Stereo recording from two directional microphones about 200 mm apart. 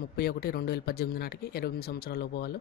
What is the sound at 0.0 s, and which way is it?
Speech, 50° left (ahead or behind).